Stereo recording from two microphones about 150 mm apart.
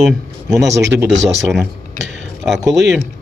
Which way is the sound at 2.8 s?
Centre (ahead or behind).